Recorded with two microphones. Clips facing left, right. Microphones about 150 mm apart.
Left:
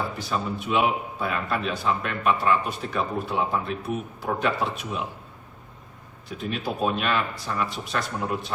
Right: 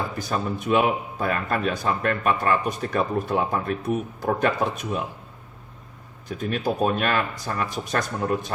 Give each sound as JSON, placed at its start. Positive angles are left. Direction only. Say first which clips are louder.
{"t": 0.2, "sound": "a man's voice", "louder": "right 2 dB", "side_deg": -45}
{"t": 6.2, "sound": "a man's voice", "louder": "right 4 dB", "side_deg": -45}